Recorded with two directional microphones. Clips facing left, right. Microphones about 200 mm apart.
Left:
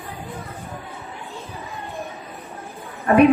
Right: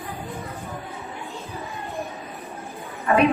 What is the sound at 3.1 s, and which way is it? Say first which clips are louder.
Speech: left 5 dB; 50° left (ahead or behind).